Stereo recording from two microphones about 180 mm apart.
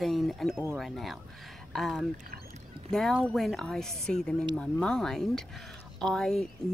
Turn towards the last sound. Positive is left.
turn(degrees=5)  # may be behind; listen again after turning